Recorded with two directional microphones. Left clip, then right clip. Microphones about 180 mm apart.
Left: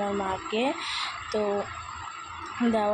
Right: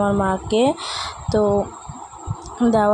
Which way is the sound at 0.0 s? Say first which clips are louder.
Right 9 dB; 55° right (ahead or behind).